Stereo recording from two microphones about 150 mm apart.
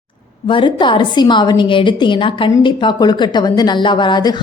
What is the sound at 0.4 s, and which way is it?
A woman's voice, 30° left (ahead or behind).